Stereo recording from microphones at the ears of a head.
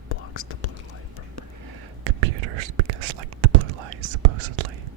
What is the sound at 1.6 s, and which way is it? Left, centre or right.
Whispering, right.